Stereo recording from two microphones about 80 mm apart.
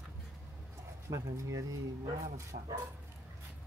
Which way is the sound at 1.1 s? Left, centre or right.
Right.